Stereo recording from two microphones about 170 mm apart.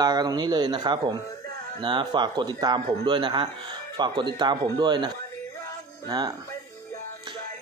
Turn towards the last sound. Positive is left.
turn(degrees=-20)  # may be behind; listen again after turning